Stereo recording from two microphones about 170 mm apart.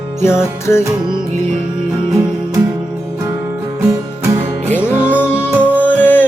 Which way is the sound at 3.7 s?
15° right (ahead or behind).